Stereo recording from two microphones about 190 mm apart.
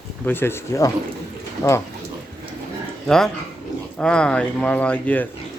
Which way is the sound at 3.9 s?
5° left (ahead or behind).